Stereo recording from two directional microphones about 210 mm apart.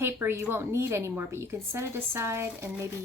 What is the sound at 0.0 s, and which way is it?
A woman's voice, 10° right (ahead or behind).